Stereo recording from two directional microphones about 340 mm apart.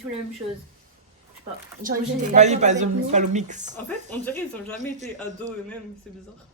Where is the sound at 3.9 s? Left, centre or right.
Centre.